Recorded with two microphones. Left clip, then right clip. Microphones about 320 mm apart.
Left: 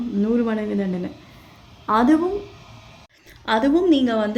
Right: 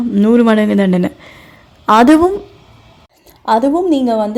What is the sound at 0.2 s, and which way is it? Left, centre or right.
Speech, right.